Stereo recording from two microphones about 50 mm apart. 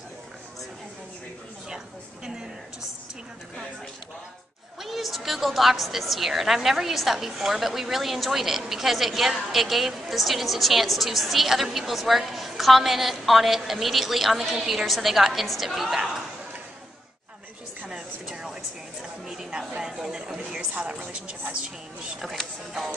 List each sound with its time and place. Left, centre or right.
4.8 s a woman's voice: centre
18.3 s a sound: centre
19.8 s speech: centre
20.7 s a woman's voice: right
22.2 s a woman's voice: centre